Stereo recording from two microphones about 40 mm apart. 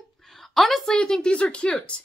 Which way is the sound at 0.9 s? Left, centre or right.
Centre.